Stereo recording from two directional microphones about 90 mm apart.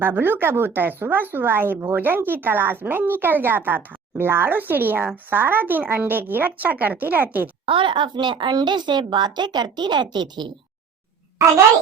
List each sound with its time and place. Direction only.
0.0 s a woman's voice: 25° right (ahead or behind)
7.6 s a woman's voice: 75° right (ahead or behind); by 10.5 s 55° right (ahead or behind)
11.4 s speech: 35° right (ahead or behind)